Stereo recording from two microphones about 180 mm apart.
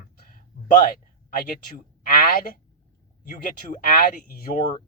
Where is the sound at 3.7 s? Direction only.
45° left (ahead or behind).